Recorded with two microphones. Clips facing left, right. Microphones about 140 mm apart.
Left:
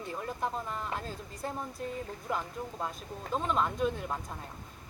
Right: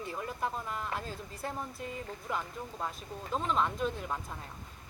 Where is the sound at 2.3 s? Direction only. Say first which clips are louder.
Left 2 dB; centre (ahead or behind).